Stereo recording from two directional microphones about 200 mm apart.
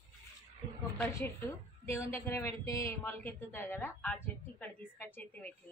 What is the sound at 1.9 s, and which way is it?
Speech, 15° left (ahead or behind).